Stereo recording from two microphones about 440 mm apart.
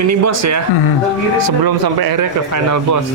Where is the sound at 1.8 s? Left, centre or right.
Right.